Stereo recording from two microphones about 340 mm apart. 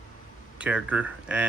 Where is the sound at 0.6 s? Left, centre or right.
Centre.